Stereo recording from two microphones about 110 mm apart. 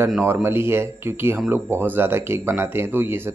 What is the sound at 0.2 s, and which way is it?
Speech, 20° right (ahead or behind).